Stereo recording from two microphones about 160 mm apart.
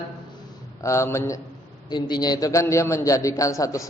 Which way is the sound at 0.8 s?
20° left (ahead or behind).